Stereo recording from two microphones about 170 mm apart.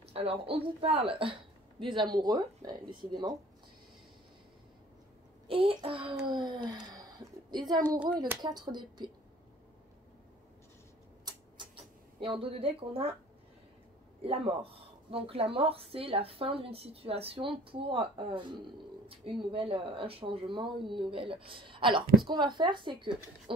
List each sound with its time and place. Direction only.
0.0 s a woman's voice: 35° right (ahead or behind)
5.5 s a woman's voice: 30° right (ahead or behind)
8.4 s a woman's voice: 25° right (ahead or behind)
11.2 s mouse: 30° right (ahead or behind)
14.2 s a woman's voice: 35° right (ahead or behind)